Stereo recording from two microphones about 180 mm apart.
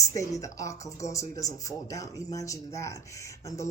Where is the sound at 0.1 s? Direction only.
15° left (ahead or behind).